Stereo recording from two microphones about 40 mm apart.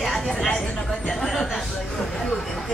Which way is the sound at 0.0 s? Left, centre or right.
Centre.